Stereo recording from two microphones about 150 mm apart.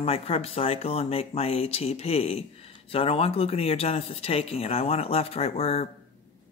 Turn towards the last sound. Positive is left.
turn(degrees=45)  # may be behind; listen again after turning